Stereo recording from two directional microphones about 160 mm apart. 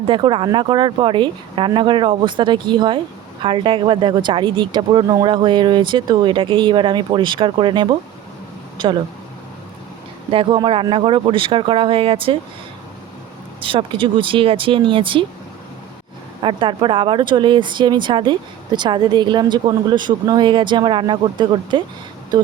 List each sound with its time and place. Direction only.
0.1 s speech: 30° right (ahead or behind)
10.3 s speech: 30° right (ahead or behind)
13.6 s speech: 35° right (ahead or behind)
16.4 s speech: 30° right (ahead or behind)